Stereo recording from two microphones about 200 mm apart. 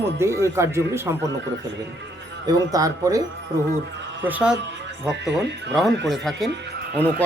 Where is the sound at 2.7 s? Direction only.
15° right (ahead or behind).